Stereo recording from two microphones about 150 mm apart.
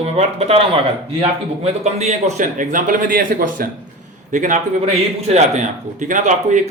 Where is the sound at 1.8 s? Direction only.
50° right (ahead or behind).